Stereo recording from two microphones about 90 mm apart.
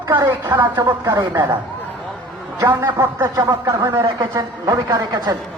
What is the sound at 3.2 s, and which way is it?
A man's voice, 45° right (ahead or behind).